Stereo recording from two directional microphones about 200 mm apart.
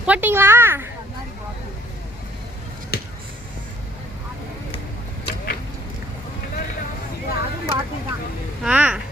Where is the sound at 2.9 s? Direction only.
55° left (ahead or behind).